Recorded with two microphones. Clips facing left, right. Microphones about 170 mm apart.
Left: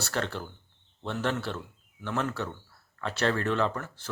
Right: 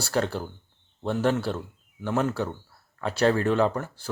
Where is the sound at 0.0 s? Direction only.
40° right (ahead or behind).